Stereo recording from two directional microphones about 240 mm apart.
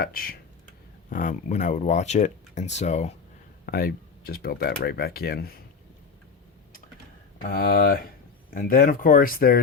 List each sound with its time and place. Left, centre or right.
0.0 s speech: left
7.4 s speech: left